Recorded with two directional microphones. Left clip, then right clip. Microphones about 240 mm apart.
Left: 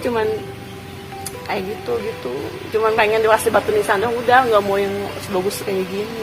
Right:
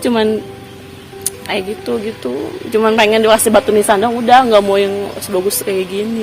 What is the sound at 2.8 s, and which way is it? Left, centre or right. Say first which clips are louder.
A woman's voice: right 5 dB; right.